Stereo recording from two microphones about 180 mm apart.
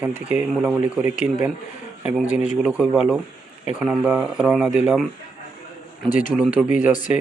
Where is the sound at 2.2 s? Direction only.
45° left (ahead or behind).